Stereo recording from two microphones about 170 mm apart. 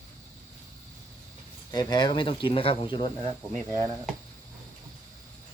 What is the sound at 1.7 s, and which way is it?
Speech, 25° left (ahead or behind).